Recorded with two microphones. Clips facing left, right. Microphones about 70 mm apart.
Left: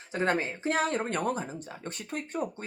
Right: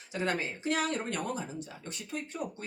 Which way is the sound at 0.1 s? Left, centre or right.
Left.